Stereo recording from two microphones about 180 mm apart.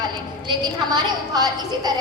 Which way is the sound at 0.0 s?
25° right (ahead or behind).